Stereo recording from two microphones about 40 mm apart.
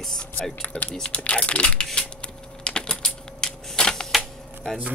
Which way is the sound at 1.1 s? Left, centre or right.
Left.